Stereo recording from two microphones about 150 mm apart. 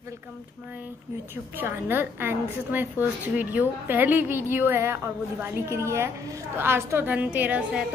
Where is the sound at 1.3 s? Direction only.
15° right (ahead or behind).